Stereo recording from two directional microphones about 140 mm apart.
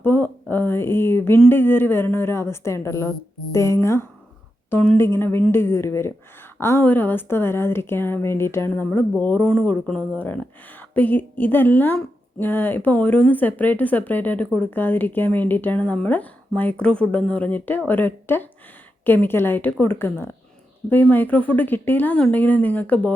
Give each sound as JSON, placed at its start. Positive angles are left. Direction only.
{"t": 0.0, "sound": "a woman's voice", "side_deg": 15}